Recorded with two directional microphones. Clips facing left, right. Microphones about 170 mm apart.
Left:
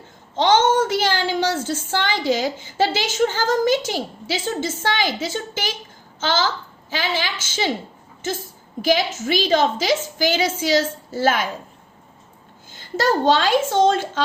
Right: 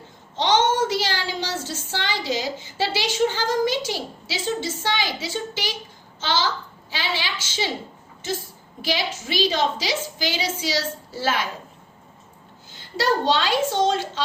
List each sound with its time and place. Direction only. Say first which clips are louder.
0.3 s a woman's voice: left 4 dB; 50° left (ahead or behind)
8.8 s a woman's voice: left 7 dB; 50° left (ahead or behind)
13.0 s a woman's voice: left 3 dB; 50° left (ahead or behind)